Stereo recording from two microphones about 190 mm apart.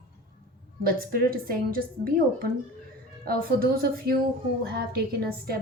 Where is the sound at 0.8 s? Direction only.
50° right (ahead or behind).